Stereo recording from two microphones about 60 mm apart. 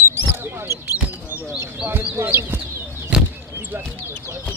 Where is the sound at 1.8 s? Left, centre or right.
Right.